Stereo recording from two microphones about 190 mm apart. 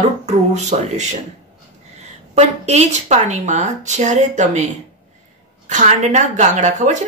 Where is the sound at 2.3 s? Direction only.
35° right (ahead or behind).